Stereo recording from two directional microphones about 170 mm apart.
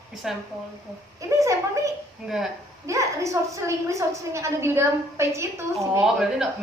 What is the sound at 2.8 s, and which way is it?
A woman's voice, 20° right (ahead or behind).